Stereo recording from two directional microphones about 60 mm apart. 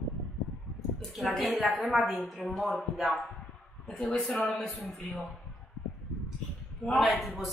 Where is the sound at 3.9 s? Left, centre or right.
Centre.